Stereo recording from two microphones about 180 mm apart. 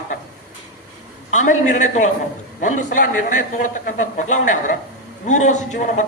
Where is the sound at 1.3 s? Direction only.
40° left (ahead or behind).